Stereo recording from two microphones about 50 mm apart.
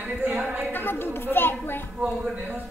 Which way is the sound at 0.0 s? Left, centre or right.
Right.